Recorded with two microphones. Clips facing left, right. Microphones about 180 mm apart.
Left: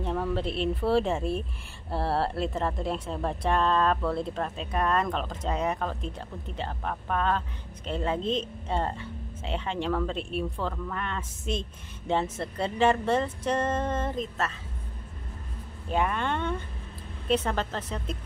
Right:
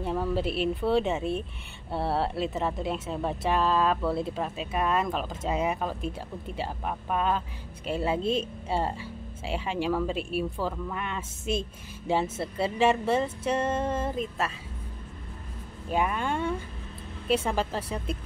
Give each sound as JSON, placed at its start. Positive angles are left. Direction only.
{"t": 0.0, "sound": "speech", "side_deg": -5}
{"t": 15.9, "sound": "speech", "side_deg": -10}